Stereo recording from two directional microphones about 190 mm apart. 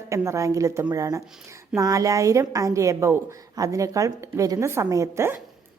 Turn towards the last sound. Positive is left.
turn(degrees=-15)  # may be behind; listen again after turning